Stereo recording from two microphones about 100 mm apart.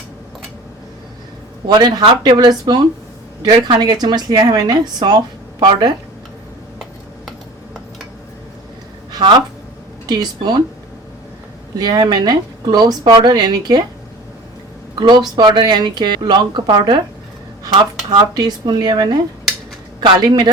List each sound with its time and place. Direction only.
1.8 s speech: 45° right (ahead or behind)
10.1 s speech: 45° right (ahead or behind)
11.8 s speech: 45° right (ahead or behind)
14.9 s speech: 45° right (ahead or behind)
18.1 s speech: 40° right (ahead or behind)